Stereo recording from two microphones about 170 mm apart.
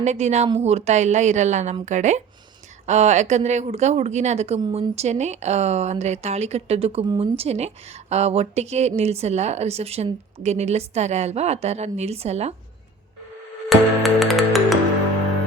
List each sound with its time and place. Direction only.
0.0 s speech: 40° right (ahead or behind)
13.7 s music: centre (ahead or behind)